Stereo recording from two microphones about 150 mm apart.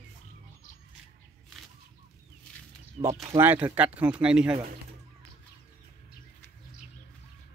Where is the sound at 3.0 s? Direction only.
50° right (ahead or behind).